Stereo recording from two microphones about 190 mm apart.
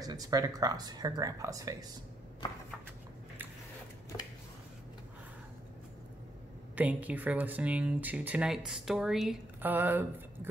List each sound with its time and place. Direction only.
0.0 s speech: 20° right (ahead or behind)
6.7 s speech: 10° right (ahead or behind)